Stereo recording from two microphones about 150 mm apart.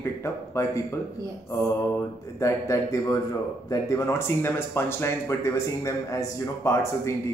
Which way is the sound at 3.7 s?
20° left (ahead or behind).